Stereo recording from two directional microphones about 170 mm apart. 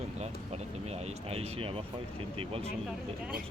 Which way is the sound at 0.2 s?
40° right (ahead or behind).